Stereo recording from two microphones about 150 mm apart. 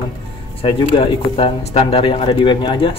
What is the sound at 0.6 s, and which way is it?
Speech, 35° left (ahead or behind).